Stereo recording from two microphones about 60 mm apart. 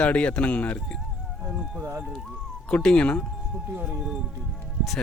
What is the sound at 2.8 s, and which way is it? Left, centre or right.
Speech, centre.